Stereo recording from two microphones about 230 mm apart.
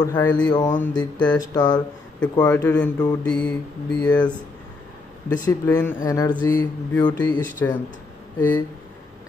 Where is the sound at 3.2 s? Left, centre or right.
Centre.